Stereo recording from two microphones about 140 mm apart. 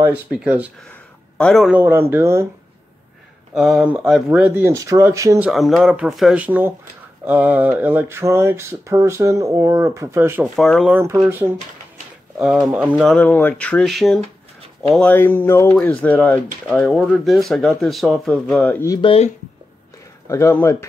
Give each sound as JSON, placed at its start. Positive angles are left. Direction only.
{"t": 0.0, "sound": "speech", "side_deg": -10}
{"t": 1.7, "sound": "speech", "side_deg": -15}
{"t": 3.5, "sound": "speech", "side_deg": 0}
{"t": 5.4, "sound": "speech", "side_deg": 0}
{"t": 10.4, "sound": "speech", "side_deg": 0}
{"t": 10.9, "sound": "speech", "side_deg": -15}
{"t": 13.1, "sound": "speech", "side_deg": 10}
{"t": 15.0, "sound": "speech", "side_deg": 15}
{"t": 18.9, "sound": "speech", "side_deg": 35}
{"t": 20.2, "sound": "speech", "side_deg": 20}